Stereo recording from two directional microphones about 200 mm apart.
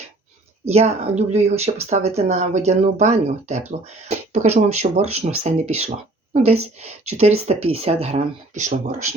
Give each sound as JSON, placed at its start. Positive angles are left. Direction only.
{"t": 0.6, "sound": "a woman's voice", "side_deg": -30}